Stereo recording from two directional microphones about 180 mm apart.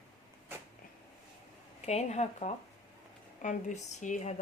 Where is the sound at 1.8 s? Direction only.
40° left (ahead or behind).